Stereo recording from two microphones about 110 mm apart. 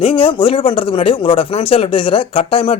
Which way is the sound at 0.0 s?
55° left (ahead or behind).